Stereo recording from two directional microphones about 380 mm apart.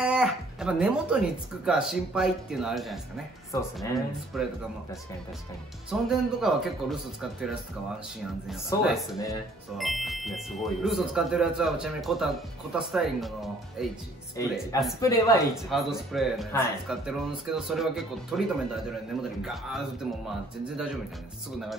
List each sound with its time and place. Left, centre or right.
0.0 s speech: centre
5.9 s speech: centre
19.4 s speech: centre